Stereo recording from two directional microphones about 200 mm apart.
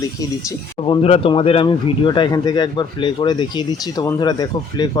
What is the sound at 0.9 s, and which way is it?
Speech, 30° left (ahead or behind).